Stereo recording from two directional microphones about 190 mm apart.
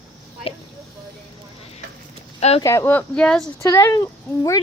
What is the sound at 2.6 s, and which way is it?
Speech, 15° left (ahead or behind).